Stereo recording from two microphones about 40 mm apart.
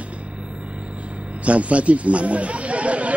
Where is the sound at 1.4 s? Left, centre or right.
Right.